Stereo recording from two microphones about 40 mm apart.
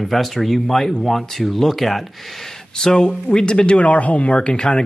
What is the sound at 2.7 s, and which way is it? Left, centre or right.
Speech, centre.